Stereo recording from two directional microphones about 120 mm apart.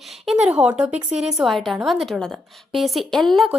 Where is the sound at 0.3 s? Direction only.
5° right (ahead or behind).